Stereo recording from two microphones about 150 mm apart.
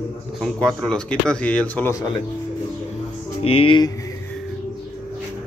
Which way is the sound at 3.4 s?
40° left (ahead or behind).